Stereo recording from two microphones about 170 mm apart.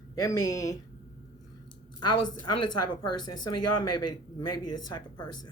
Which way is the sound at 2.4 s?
25° left (ahead or behind).